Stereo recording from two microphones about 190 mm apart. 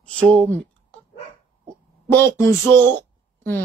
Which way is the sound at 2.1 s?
10° left (ahead or behind).